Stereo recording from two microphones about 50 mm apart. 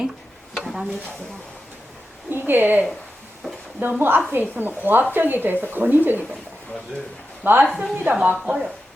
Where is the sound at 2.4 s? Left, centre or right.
Right.